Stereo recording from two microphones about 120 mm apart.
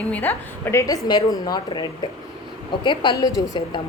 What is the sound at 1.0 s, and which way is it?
A woman's voice, 35° left (ahead or behind).